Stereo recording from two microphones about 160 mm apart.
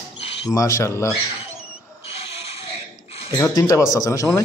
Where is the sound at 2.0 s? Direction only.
40° left (ahead or behind).